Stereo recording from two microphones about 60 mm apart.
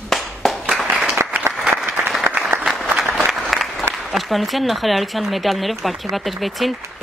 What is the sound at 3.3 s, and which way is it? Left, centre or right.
Applause, centre.